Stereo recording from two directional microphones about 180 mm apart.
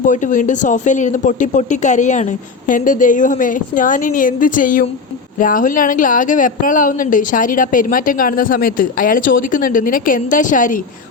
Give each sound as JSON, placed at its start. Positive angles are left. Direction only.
{"t": 0.0, "sound": "a woman's voice", "side_deg": 45}